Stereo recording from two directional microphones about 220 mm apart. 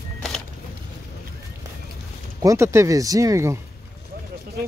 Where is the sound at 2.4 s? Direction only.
10° right (ahead or behind).